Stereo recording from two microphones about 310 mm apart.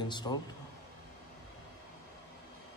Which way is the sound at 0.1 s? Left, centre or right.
Centre.